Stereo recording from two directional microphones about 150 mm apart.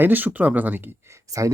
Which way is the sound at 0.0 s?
10° right (ahead or behind).